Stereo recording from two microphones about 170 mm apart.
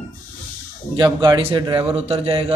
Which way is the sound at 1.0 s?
25° right (ahead or behind).